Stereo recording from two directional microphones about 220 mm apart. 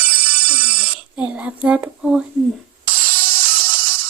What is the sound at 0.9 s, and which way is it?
Speech, 5° right (ahead or behind).